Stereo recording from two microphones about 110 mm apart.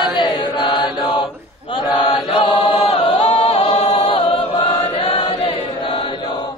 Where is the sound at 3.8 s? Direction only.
55° left (ahead or behind).